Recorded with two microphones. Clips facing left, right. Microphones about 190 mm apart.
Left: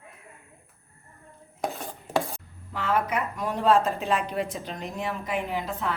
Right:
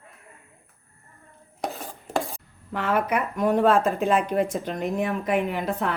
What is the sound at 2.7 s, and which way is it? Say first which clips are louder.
Speech: right 3 dB; 55° right (ahead or behind).